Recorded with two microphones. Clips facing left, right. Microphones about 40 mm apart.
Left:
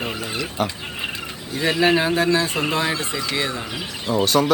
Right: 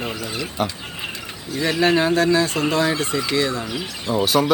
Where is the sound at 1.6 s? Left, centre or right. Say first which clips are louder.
Even; centre.